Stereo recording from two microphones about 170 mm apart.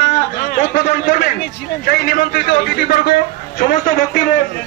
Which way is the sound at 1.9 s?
60° left (ahead or behind).